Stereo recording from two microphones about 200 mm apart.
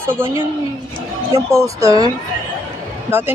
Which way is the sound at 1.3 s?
15° right (ahead or behind).